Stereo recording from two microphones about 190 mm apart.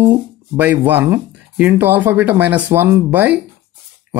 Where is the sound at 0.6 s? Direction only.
10° right (ahead or behind).